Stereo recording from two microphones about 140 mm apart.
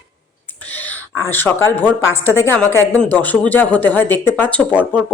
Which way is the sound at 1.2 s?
15° left (ahead or behind).